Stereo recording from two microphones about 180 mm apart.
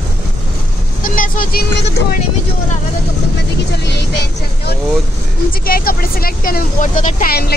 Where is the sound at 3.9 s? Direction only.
70° left (ahead or behind).